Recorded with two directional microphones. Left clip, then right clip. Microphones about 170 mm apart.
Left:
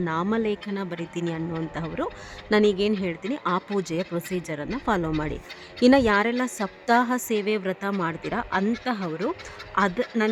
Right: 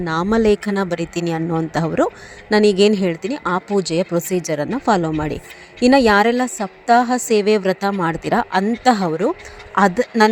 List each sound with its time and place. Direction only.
0.0 s a woman's voice: 30° right (ahead or behind)
2.7 s a woman's voice: 45° right (ahead or behind)
3.2 s a woman's voice: 25° right (ahead or behind)
6.4 s a woman's voice: 15° right (ahead or behind)
7.3 s speech: 40° right (ahead or behind)
8.8 s a woman's voice: 45° right (ahead or behind)
9.0 s speech: 30° right (ahead or behind)